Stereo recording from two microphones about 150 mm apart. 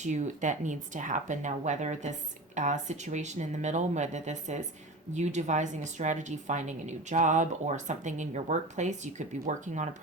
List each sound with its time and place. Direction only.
0.0 s a woman's voice: 55° right (ahead or behind)